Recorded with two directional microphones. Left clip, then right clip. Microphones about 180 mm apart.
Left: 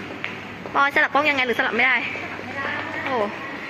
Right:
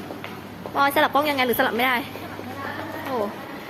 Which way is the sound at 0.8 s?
15° right (ahead or behind).